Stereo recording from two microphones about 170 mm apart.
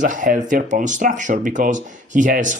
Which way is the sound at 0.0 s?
50° right (ahead or behind).